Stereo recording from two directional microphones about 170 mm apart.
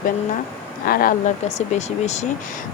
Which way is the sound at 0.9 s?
60° left (ahead or behind).